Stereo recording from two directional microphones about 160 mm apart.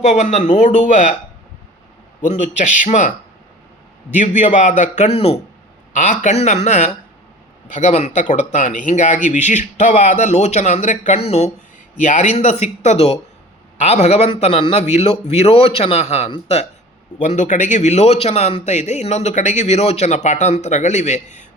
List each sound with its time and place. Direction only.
0.0 s a man's voice: 45° left (ahead or behind)
2.4 s a man's voice: 50° left (ahead or behind)